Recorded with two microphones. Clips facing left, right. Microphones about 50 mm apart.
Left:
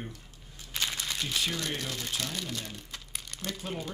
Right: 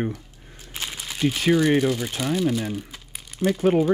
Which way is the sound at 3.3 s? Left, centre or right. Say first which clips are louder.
Right 19 dB; centre.